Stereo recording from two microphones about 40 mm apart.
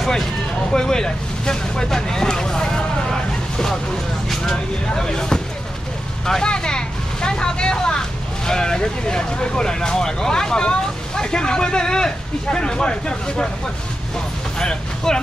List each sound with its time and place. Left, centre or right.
0.7 s vehicle: centre
8.5 s speech: centre
14.6 s speech: left